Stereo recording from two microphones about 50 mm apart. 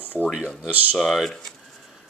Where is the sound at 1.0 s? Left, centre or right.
Centre.